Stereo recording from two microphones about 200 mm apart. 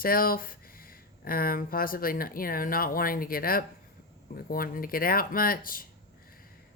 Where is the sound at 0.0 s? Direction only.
45° left (ahead or behind).